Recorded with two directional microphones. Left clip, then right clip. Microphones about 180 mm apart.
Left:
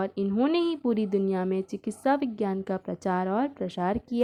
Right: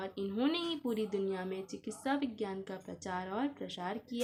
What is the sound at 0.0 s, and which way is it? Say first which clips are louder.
Speech: left 8 dB; 45° left (ahead or behind).